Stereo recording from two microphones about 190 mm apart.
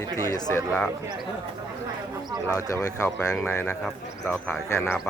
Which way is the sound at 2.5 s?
15° left (ahead or behind).